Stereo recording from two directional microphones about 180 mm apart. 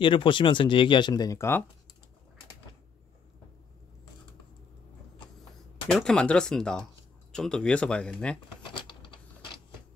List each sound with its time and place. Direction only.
0.0 s speech: 30° left (ahead or behind)
5.9 s speech: 5° left (ahead or behind)
8.8 s a sound: 25° left (ahead or behind)